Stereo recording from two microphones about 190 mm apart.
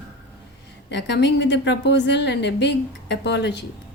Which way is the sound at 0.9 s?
65° left (ahead or behind).